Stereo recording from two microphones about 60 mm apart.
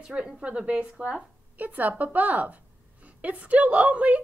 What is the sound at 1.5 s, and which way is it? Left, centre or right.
A woman's voice, right.